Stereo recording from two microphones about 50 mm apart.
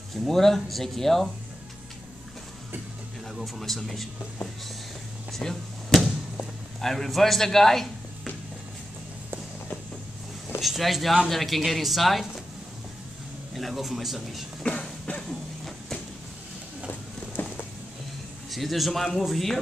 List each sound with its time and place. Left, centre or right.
0.1 s speech: centre
3.3 s speech: centre
5.3 s speech: centre
10.6 s speech: centre
13.6 s speech: centre
14.6 s a sound: left
15.2 s a sound: centre
17.4 s a sound: left
18.5 s speech: centre